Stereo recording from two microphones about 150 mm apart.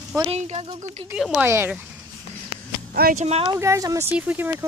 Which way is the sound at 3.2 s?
45° right (ahead or behind).